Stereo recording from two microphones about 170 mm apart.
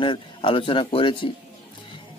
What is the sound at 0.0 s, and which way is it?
Speech, 30° left (ahead or behind).